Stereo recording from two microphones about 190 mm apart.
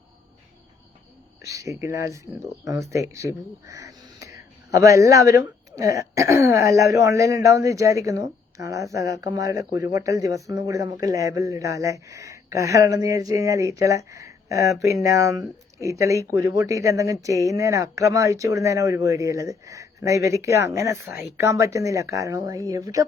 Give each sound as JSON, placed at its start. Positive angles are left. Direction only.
{"t": 1.5, "sound": "speech", "side_deg": -15}